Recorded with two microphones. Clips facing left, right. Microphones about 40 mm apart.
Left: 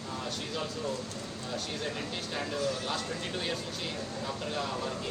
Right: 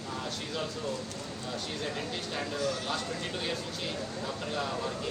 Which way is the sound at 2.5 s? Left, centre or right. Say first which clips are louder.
Even; right.